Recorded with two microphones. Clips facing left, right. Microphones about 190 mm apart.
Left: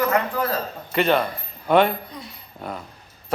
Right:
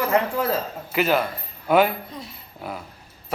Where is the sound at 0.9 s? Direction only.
5° right (ahead or behind).